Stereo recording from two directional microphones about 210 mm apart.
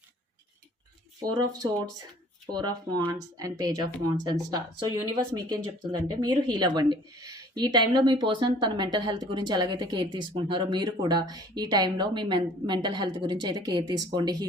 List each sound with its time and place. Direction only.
1.2 s a woman's voice: 20° right (ahead or behind)